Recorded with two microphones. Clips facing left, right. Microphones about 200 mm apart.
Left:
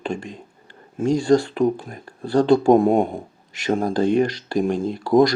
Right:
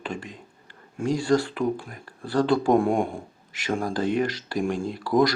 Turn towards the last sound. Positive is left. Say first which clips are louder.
# left 5 dB
turn(degrees=25)  # may be behind; listen again after turning